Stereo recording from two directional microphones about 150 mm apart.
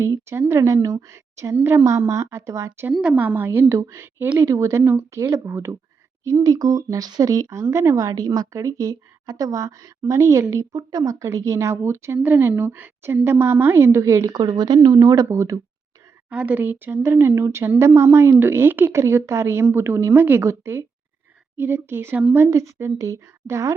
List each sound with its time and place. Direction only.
0.0 s a woman's voice: 15° right (ahead or behind)
2.9 s a woman's voice: 5° right (ahead or behind)
16.3 s speech: 10° right (ahead or behind)
22.4 s a woman's voice: 20° right (ahead or behind)